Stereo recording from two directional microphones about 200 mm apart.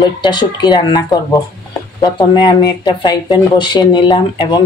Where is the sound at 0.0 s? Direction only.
20° left (ahead or behind).